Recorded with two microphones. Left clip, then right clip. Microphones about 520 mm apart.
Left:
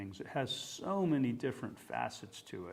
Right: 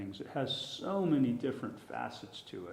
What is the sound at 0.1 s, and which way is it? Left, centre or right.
A man's voice, left.